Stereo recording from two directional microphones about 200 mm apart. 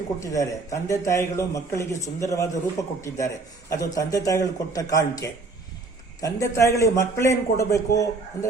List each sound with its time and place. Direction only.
0.2 s a man's voice: 15° left (ahead or behind)